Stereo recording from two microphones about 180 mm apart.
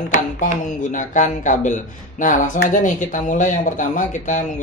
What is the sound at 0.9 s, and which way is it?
Speech, 45° left (ahead or behind).